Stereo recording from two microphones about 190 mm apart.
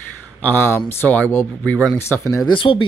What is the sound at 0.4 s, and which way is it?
Speech, 10° left (ahead or behind).